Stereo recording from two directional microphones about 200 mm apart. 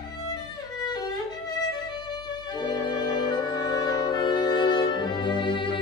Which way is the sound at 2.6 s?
20° left (ahead or behind).